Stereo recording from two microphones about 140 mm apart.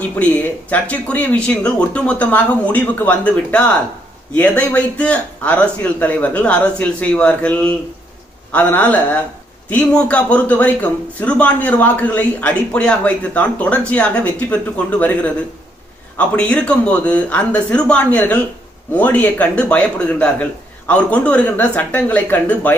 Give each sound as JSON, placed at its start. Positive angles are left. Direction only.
{"t": 0.2, "sound": "a man's voice", "side_deg": 10}